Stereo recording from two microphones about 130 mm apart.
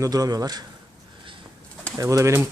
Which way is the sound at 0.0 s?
30° right (ahead or behind).